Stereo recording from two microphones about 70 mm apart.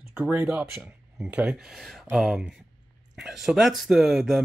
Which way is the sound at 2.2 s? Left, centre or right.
Centre.